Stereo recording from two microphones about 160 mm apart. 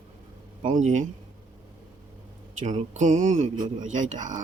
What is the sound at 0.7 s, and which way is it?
Speech, 50° right (ahead or behind).